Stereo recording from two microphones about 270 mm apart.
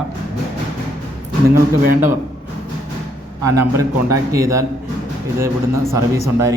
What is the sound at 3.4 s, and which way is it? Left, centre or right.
A man's voice, centre.